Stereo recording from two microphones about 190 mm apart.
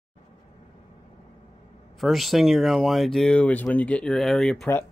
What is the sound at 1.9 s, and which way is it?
Speech, centre (ahead or behind).